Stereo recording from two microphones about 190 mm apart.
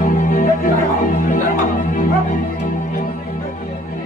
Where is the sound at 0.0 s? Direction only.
45° left (ahead or behind).